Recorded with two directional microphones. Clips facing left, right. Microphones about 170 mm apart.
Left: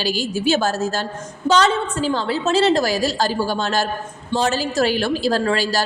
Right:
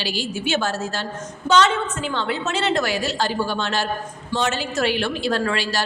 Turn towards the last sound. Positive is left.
turn(degrees=40)  # may be behind; listen again after turning